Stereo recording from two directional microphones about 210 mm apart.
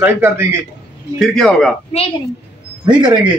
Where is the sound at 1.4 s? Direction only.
5° left (ahead or behind).